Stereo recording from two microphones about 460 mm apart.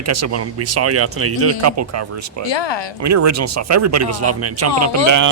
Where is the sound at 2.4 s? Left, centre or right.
Left.